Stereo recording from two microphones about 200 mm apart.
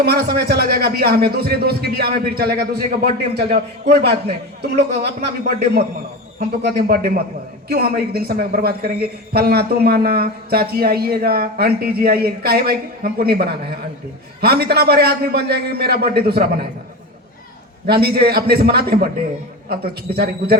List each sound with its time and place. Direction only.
0.0 s a man's voice: 55° right (ahead or behind)
6.7 s a man's voice: 50° right (ahead or behind)
17.8 s a man's voice: 50° right (ahead or behind)